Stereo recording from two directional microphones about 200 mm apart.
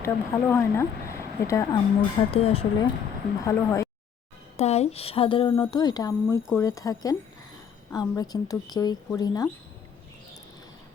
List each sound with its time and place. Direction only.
0.0 s speech: 10° left (ahead or behind); by 2.9 s 30° left (ahead or behind)
3.4 s speech: 15° left (ahead or behind)
4.5 s speech: 30° left (ahead or behind)